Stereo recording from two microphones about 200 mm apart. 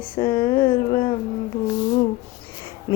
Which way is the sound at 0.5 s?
45° left (ahead or behind).